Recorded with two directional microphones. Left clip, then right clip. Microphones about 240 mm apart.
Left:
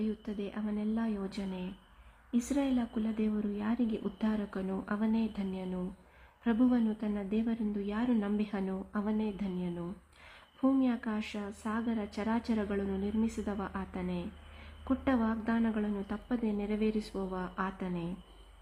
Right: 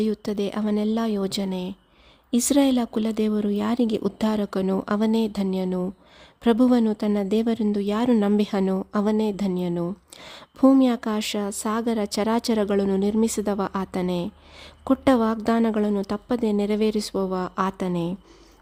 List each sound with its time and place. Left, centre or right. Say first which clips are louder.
0.0 s speech: right 13 dB; right